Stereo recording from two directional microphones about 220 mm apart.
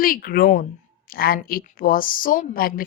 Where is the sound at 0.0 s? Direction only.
40° left (ahead or behind).